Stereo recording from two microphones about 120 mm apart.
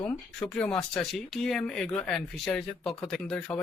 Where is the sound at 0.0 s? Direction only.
10° left (ahead or behind).